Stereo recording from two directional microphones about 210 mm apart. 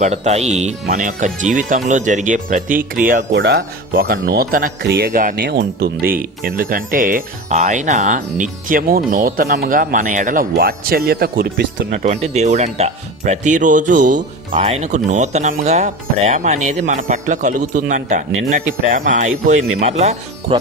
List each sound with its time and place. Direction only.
0.0 s speech: 30° right (ahead or behind)
3.3 s speech: 50° right (ahead or behind)
11.9 s speech: 35° right (ahead or behind)